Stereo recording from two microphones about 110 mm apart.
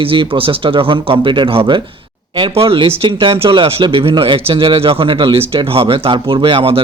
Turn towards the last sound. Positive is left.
turn(degrees=-55)  # may be behind; listen again after turning